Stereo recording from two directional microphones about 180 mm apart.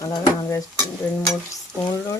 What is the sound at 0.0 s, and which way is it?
Frying, 20° left (ahead or behind).